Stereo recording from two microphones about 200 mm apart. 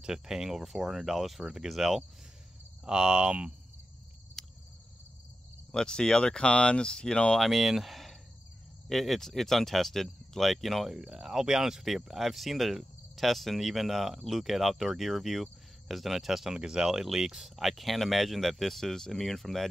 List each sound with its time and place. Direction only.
0.0 s speech: 5° right (ahead or behind)
4.4 s cricket: centre (ahead or behind)
5.7 s speech: 5° left (ahead or behind)